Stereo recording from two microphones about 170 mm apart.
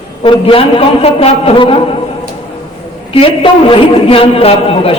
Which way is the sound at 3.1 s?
30° left (ahead or behind).